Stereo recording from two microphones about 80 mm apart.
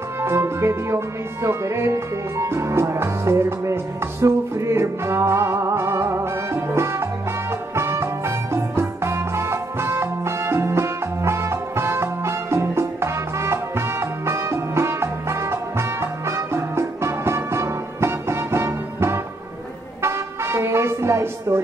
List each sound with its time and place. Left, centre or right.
0.2 s speech: right
7.7 s music: right